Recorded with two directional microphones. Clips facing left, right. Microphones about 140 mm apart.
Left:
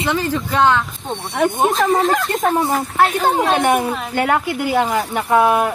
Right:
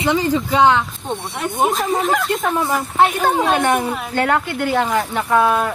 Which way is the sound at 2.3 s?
40° left (ahead or behind).